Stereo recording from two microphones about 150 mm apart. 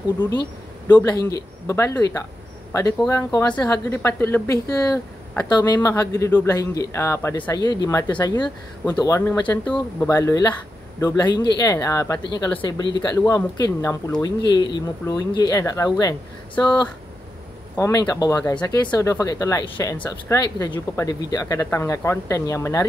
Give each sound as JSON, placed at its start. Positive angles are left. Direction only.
{"t": 0.9, "sound": "speech", "side_deg": 25}